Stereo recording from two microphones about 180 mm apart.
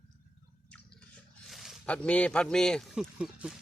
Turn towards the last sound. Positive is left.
turn(degrees=-5)  # may be behind; listen again after turning